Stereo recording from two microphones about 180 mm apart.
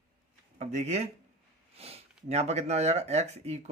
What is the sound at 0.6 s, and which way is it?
Speech, 40° right (ahead or behind).